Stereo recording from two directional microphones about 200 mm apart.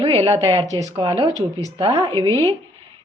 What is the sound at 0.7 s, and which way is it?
Speech, 15° left (ahead or behind).